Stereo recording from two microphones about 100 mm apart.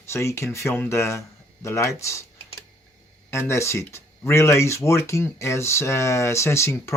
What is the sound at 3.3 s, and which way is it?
Speech, 25° left (ahead or behind).